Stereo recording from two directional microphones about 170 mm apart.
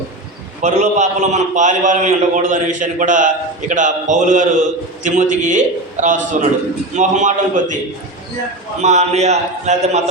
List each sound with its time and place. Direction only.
0.6 s a man's voice: 45° right (ahead or behind)
8.8 s a man's voice: 40° right (ahead or behind)